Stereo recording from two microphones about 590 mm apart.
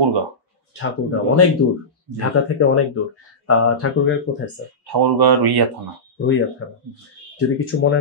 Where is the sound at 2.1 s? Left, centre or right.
Left.